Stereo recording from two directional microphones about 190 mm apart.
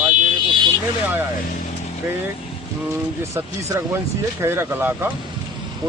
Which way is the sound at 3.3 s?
15° right (ahead or behind).